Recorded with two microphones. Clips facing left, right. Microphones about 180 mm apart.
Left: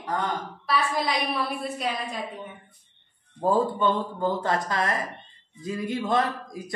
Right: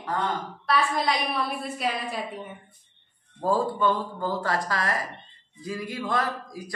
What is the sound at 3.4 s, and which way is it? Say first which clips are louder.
A man's voice: left 1 dB; 20° left (ahead or behind).